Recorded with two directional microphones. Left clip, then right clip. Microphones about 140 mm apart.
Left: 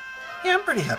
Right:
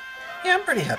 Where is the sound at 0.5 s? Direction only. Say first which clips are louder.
Even; 20° left (ahead or behind).